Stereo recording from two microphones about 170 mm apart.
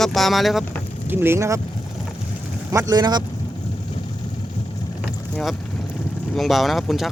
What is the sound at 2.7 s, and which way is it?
Speech, 20° right (ahead or behind).